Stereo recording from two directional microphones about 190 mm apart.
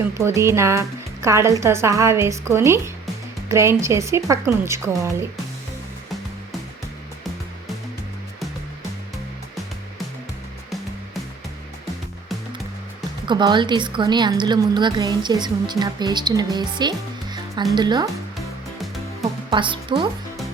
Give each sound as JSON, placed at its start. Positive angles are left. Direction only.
{"t": 0.2, "sound": "speech", "side_deg": -15}
{"t": 13.2, "sound": "a woman's voice", "side_deg": -25}
{"t": 19.5, "sound": "speech", "side_deg": -25}